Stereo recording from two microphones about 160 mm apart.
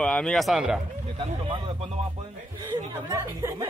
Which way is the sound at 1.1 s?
35° right (ahead or behind).